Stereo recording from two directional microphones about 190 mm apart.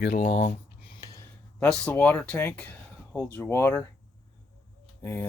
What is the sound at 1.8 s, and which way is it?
A man's voice, 10° left (ahead or behind).